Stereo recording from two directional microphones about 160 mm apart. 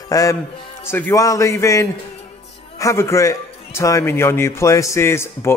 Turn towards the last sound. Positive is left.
turn(degrees=15)  # may be behind; listen again after turning